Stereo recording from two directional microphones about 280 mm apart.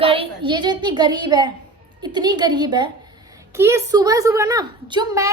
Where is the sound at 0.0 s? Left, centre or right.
Centre.